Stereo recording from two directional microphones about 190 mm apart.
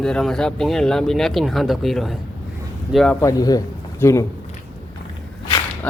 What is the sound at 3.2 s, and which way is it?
Speech, 20° left (ahead or behind).